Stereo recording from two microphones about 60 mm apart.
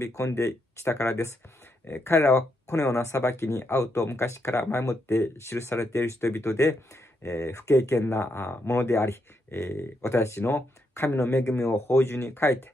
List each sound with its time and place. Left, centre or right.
0.0 s speech: left
1.9 s speech: left
2.2 s speech: left